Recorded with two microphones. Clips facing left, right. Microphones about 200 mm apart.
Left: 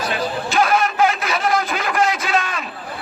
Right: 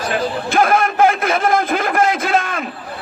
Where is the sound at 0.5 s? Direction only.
55° right (ahead or behind).